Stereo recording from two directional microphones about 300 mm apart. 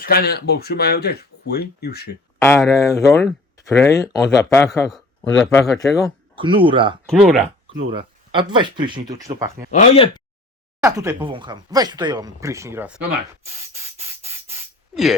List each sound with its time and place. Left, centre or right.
0.0 s speech: left
2.4 s speech: centre
6.1 s speech: centre
7.1 s speech: centre
7.8 s speech: centre
9.7 s speech: centre
10.8 s speech: centre
13.5 s spray: centre